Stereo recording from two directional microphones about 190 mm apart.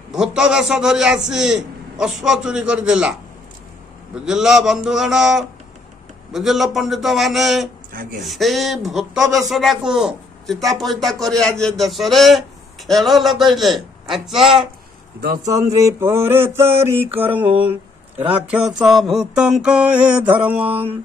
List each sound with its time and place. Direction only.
0.1 s a man's voice: 5° right (ahead or behind)
7.9 s speech: 45° right (ahead or behind)
8.2 s a man's voice: centre (ahead or behind)
15.4 s a sound: 15° right (ahead or behind)
17.6 s a man's voice: 10° right (ahead or behind)
20.6 s mantra: 30° right (ahead or behind)